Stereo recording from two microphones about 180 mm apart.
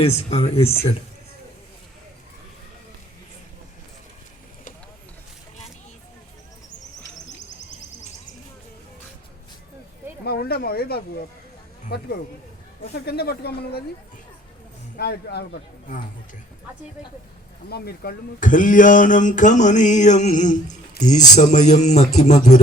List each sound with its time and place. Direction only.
0.0 s a man's voice: 35° left (ahead or behind)
10.2 s a woman's voice: 60° left (ahead or behind)
14.9 s a woman's voice: 65° left (ahead or behind)
17.7 s a man's voice: 60° left (ahead or behind); by 22.6 s 40° left (ahead or behind)